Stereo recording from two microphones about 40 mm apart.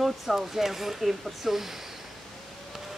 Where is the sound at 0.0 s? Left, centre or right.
Centre.